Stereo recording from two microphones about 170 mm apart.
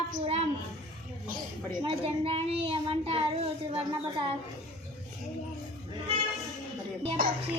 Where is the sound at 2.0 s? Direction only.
35° right (ahead or behind).